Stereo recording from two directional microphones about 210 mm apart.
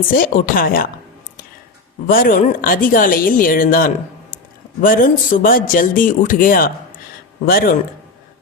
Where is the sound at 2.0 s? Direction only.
40° left (ahead or behind).